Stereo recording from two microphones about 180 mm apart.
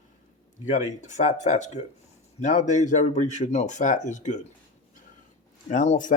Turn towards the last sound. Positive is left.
turn(degrees=45)  # may be behind; listen again after turning